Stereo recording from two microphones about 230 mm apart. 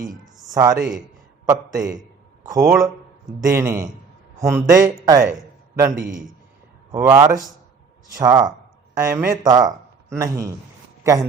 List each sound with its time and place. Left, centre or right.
0.5 s speech: centre
0.8 s a man's voice: centre
1.5 s speech: centre
6.9 s a man's voice: centre